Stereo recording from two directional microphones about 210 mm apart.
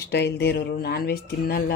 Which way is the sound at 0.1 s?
50° left (ahead or behind).